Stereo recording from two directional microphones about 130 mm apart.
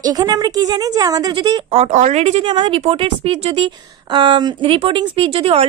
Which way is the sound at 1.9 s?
70° right (ahead or behind).